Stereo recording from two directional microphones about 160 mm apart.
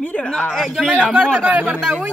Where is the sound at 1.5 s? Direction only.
10° right (ahead or behind).